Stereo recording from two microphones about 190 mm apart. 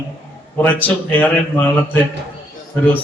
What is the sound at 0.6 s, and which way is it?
A man's voice, 10° left (ahead or behind).